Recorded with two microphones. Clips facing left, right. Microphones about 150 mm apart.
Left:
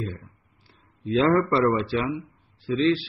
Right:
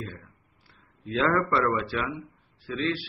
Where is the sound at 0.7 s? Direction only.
25° left (ahead or behind).